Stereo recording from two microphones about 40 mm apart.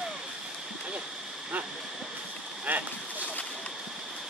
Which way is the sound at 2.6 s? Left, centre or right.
Right.